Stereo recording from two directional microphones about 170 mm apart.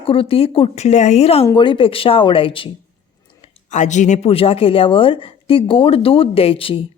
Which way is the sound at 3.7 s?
45° left (ahead or behind).